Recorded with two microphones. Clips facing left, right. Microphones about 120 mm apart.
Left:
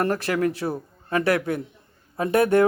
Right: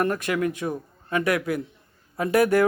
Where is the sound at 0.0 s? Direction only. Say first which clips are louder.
Left 1 dB; 35° left (ahead or behind).